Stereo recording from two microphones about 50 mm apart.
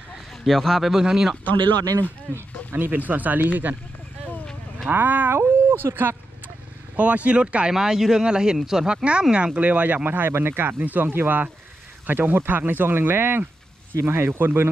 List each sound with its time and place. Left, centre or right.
0.5 s speech: centre
2.7 s speech: right
4.8 s speech: right
5.9 s vehicle: right
7.0 s speech: right
7.7 s speech: centre
9.6 s speech: right